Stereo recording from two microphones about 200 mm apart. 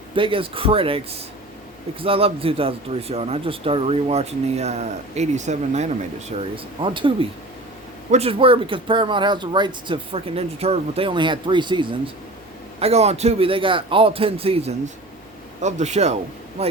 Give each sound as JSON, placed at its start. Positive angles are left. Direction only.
{"t": 0.2, "sound": "speech", "side_deg": -25}
{"t": 6.8, "sound": "speech", "side_deg": -25}